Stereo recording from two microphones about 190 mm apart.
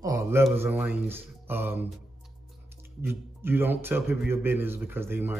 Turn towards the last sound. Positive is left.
turn(degrees=-10)  # may be behind; listen again after turning